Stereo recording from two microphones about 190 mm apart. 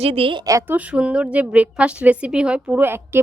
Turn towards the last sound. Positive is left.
turn(degrees=-10)  # may be behind; listen again after turning